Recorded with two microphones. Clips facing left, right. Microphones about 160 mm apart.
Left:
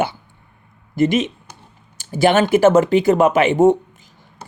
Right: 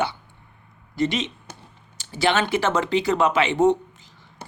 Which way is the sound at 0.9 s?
50° left (ahead or behind).